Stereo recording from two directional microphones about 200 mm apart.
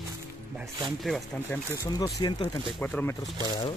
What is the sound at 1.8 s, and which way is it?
Speech, 20° left (ahead or behind).